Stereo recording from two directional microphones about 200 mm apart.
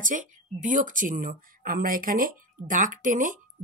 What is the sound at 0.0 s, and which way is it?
Speech, 40° right (ahead or behind).